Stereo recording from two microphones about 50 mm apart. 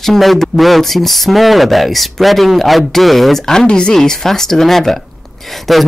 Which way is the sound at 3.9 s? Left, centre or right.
Centre.